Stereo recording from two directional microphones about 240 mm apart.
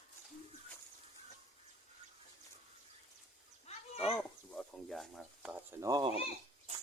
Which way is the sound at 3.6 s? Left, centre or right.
Left.